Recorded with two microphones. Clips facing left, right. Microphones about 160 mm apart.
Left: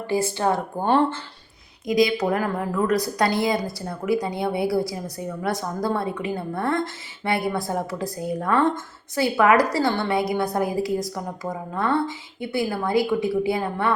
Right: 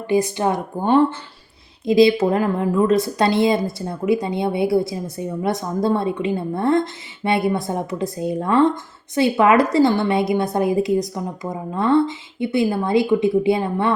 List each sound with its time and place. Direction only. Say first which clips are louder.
0.1 s speech: right 4 dB; 15° right (ahead or behind)
1.8 s a woman's voice: right 6 dB; 30° right (ahead or behind)